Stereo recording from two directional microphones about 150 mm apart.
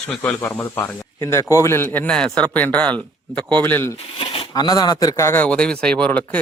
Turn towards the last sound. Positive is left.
turn(degrees=10)  # may be behind; listen again after turning